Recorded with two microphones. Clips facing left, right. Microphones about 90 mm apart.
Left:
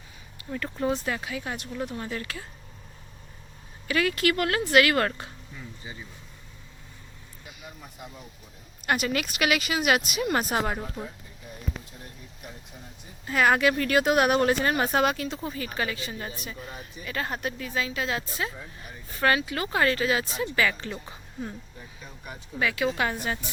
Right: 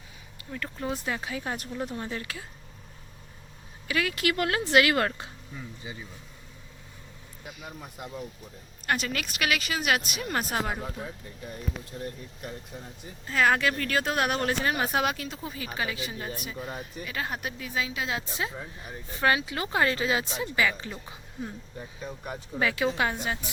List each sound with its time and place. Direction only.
0.3 s speech: 5° left (ahead or behind)
1.0 s speech: 25° right (ahead or behind)
1.9 s speech: 25° right (ahead or behind)
2.2 s speech: 15° right (ahead or behind)
3.8 s speech: 5° right (ahead or behind)
4.2 s speech: 20° right (ahead or behind)
8.9 s speech: 10° left (ahead or behind)
11.9 s speech: 70° right (ahead or behind)
13.0 s speech: 5° left (ahead or behind); by 20.9 s 10° right (ahead or behind)
20.9 s speech: centre (ahead or behind)
22.5 s speech: 30° right (ahead or behind)